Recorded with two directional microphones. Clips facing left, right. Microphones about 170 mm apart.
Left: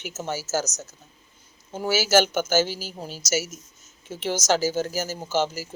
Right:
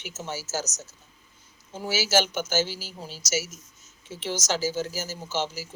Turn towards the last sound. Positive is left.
turn(degrees=50)  # may be behind; listen again after turning